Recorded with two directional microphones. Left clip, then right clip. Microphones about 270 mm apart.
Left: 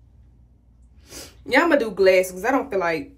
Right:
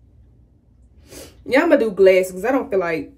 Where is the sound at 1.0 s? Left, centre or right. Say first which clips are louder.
Right 3 dB; centre.